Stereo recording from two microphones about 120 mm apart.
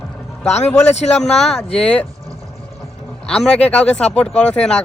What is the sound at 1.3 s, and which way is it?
Speech, 5° left (ahead or behind).